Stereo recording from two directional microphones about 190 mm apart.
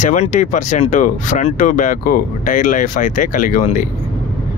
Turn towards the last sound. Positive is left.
turn(degrees=45)  # may be behind; listen again after turning